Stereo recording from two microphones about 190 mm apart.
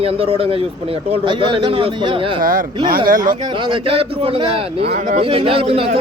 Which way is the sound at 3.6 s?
30° right (ahead or behind).